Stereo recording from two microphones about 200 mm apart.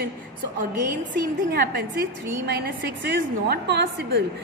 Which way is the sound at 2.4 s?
55° right (ahead or behind).